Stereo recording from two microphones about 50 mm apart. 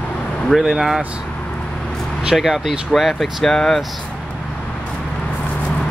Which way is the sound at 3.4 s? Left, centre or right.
Centre.